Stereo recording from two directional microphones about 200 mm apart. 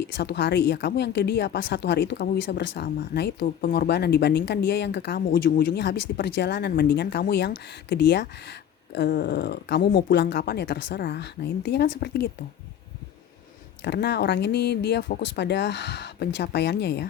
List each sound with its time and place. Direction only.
0.0 s a woman's voice: 55° left (ahead or behind)
13.8 s a woman's voice: 55° left (ahead or behind)